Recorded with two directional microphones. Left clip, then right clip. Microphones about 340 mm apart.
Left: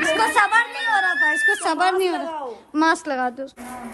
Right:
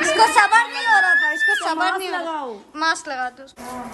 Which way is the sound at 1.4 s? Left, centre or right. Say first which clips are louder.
Even; centre.